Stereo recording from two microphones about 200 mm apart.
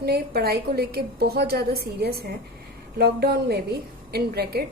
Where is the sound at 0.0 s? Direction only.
50° right (ahead or behind).